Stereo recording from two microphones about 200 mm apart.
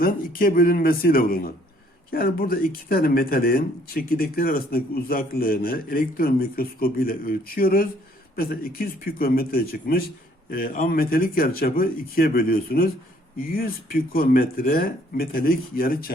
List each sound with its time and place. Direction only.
0.0 s speech: 45° left (ahead or behind)